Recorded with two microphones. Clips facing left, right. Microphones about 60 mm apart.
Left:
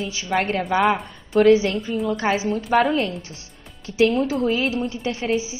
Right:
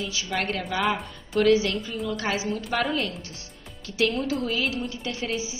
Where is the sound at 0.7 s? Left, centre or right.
Left.